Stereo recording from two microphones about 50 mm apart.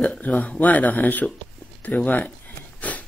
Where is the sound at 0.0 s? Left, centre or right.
Left.